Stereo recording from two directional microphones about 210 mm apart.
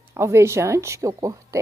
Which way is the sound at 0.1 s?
15° right (ahead or behind).